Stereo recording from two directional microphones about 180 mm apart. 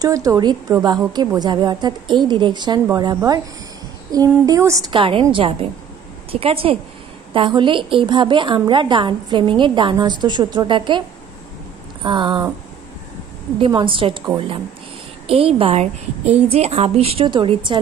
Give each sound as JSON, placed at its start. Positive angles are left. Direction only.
{"t": 0.0, "sound": "a woman's voice", "side_deg": -20}
{"t": 13.6, "sound": "a woman's voice", "side_deg": -25}